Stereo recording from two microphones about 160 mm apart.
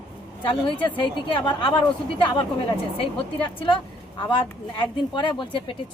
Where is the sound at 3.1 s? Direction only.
30° left (ahead or behind).